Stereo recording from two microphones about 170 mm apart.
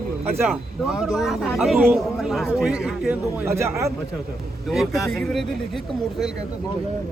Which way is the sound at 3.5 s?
15° right (ahead or behind).